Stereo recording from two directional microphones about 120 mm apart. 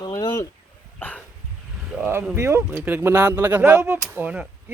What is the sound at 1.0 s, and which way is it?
Dog, 15° left (ahead or behind).